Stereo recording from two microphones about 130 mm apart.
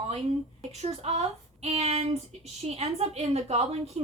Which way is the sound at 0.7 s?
55° right (ahead or behind).